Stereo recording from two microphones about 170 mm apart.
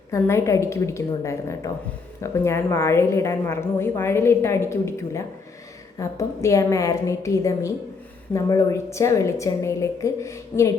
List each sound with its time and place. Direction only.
0.1 s a woman's voice: 15° left (ahead or behind)